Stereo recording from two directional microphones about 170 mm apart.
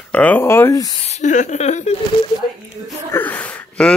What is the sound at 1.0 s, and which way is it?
Speech, 45° left (ahead or behind).